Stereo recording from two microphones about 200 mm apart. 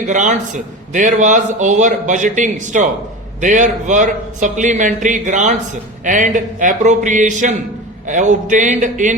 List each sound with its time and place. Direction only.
0.0 s a man's voice: 40° right (ahead or behind)